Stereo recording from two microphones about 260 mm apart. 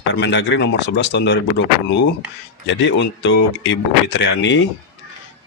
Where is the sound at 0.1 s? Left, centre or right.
Left.